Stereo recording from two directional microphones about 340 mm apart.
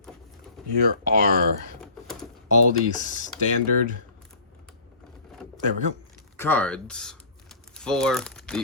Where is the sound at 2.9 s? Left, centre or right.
Left.